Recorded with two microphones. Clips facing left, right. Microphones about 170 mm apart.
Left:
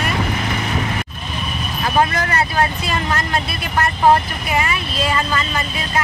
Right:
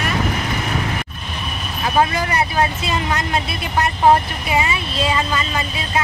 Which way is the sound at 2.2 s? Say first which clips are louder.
Even; 15° right (ahead or behind).